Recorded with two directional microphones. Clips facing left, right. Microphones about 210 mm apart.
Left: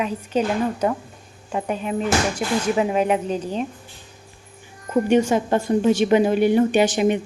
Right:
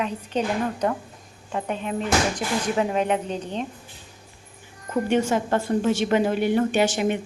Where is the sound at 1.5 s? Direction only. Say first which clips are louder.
Left 3 dB; 5° left (ahead or behind).